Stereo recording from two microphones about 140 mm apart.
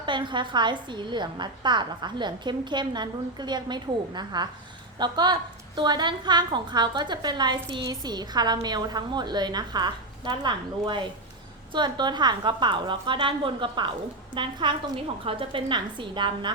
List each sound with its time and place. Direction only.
0.0 s a woman's voice: 35° right (ahead or behind)